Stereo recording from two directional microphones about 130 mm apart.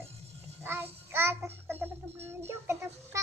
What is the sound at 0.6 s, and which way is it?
Music, 15° right (ahead or behind).